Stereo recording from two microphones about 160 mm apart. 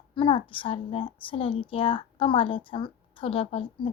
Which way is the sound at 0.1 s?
30° left (ahead or behind).